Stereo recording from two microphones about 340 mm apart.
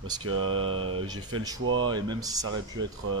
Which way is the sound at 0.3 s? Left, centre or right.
Right.